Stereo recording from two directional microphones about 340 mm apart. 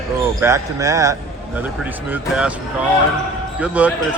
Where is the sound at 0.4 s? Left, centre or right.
Centre.